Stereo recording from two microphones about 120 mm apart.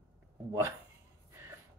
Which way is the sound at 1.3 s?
25° right (ahead or behind).